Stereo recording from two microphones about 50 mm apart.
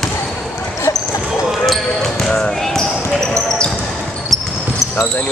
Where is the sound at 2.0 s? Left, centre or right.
Centre.